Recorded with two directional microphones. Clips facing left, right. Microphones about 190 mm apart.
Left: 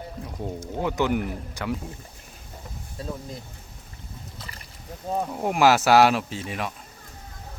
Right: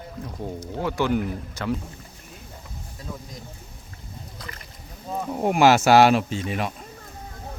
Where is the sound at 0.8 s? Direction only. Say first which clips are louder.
Right 1 dB; 15° left (ahead or behind).